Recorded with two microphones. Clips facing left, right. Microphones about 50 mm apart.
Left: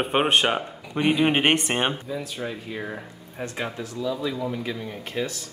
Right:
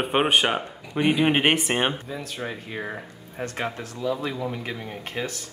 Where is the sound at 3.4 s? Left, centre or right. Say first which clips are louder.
Right 1 dB; right.